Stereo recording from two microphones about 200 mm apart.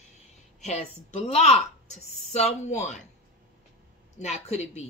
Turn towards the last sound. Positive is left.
turn(degrees=35)  # may be behind; listen again after turning